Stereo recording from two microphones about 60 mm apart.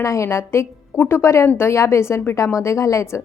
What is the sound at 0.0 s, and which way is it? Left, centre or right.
A woman's voice, left.